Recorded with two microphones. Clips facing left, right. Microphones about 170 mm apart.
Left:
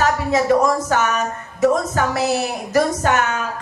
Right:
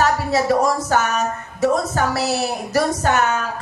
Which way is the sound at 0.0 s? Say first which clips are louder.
Even; 35° right (ahead or behind).